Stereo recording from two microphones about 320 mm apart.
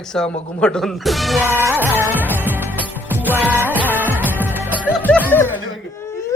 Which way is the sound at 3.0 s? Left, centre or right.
Centre.